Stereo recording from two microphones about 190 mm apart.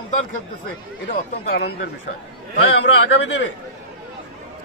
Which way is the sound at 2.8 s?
65° left (ahead or behind).